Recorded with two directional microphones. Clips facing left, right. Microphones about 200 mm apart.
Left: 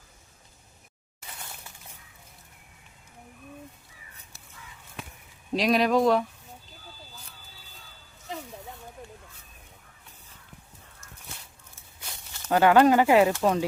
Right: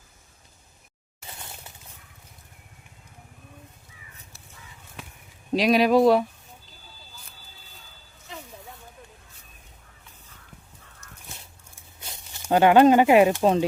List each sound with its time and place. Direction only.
5.5 s speech: 5° right (ahead or behind)
11.9 s speech: 20° right (ahead or behind)